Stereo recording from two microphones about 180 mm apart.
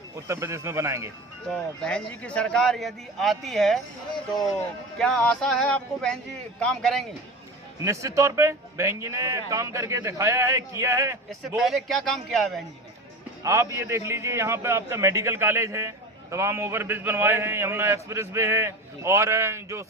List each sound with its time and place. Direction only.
0.3 s a man's voice: 15° right (ahead or behind)
1.5 s a man's voice: 5° left (ahead or behind)
4.9 s a man's voice: 5° left (ahead or behind)
7.9 s a man's voice: 15° right (ahead or behind)
11.3 s a man's voice: centre (ahead or behind)
13.4 s a man's voice: 15° right (ahead or behind)